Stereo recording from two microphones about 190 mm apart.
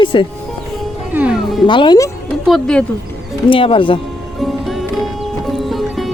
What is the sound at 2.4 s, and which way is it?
Music, centre (ahead or behind).